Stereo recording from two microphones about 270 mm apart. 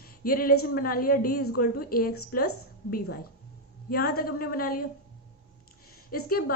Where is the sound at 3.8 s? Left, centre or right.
Left.